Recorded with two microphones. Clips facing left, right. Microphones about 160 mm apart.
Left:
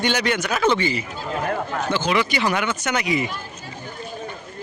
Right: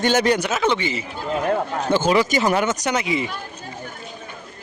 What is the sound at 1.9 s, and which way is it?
Speech, 45° right (ahead or behind).